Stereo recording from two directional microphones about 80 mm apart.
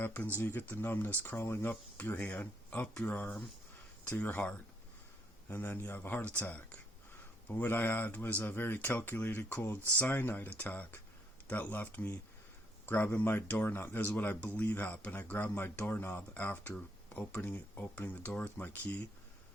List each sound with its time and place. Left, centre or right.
0.0 s speech: left